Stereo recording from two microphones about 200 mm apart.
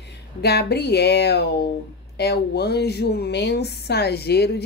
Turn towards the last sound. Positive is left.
turn(degrees=55)  # may be behind; listen again after turning